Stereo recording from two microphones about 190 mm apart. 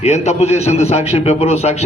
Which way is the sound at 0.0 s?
35° left (ahead or behind).